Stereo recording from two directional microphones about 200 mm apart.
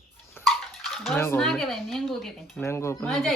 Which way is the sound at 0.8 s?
Centre (ahead or behind).